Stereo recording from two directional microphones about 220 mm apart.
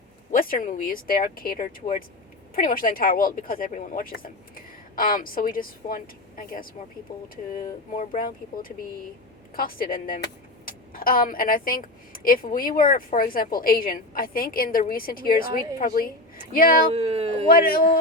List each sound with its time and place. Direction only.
0.3 s speech: 40° left (ahead or behind)
16.9 s speech: 25° right (ahead or behind)
17.4 s speech: 40° left (ahead or behind)